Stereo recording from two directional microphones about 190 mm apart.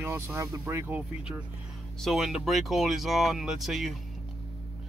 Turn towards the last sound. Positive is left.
turn(degrees=0)  # may be behind; listen again after turning